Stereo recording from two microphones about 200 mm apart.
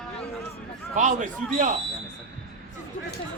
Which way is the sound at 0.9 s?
40° right (ahead or behind).